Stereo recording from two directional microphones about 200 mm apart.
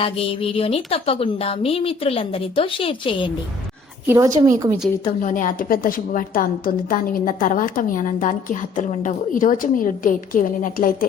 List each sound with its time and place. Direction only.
0.0 s a woman's voice: 30° left (ahead or behind)
4.0 s a woman's voice: 15° right (ahead or behind)
5.2 s a woman's voice: 40° left (ahead or behind)